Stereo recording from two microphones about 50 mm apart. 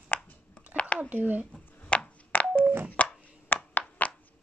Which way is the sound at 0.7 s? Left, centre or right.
Right.